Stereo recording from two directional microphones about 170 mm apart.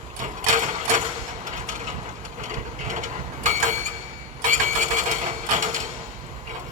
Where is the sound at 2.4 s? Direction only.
45° right (ahead or behind).